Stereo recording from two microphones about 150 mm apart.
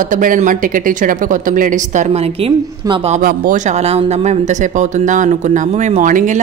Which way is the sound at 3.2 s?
65° right (ahead or behind).